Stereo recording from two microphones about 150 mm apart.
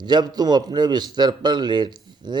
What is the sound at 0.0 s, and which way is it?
A man's voice, 30° right (ahead or behind).